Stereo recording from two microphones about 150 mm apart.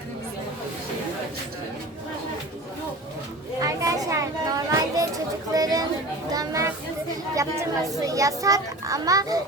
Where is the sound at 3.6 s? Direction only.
25° right (ahead or behind).